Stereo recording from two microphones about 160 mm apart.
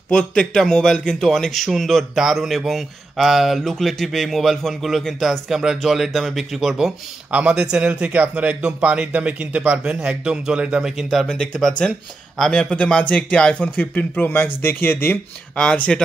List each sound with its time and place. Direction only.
0.1 s speech: 5° left (ahead or behind)